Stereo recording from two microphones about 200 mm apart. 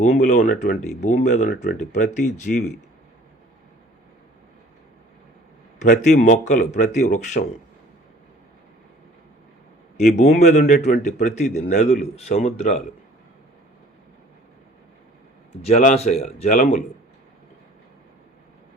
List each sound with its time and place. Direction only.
0.0 s speech: 35° left (ahead or behind)
5.8 s speech: 40° left (ahead or behind)
10.2 s speech: 35° left (ahead or behind)
15.6 s speech: 35° left (ahead or behind)